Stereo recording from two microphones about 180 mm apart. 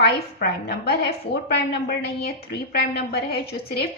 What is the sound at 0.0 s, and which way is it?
A woman's voice, 60° left (ahead or behind).